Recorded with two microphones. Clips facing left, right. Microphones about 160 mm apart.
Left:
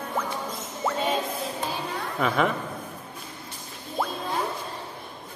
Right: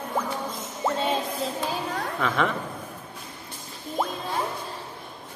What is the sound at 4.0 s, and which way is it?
Music, 15° right (ahead or behind).